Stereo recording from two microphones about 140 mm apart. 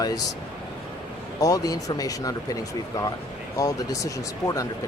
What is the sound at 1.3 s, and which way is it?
Speech, 25° left (ahead or behind).